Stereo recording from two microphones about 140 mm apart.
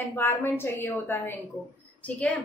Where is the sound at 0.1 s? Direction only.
15° left (ahead or behind).